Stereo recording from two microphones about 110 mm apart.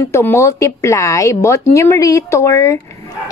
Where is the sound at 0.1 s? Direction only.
25° left (ahead or behind).